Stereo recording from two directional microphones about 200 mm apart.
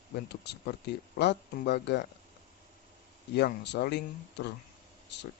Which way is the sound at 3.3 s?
55° left (ahead or behind).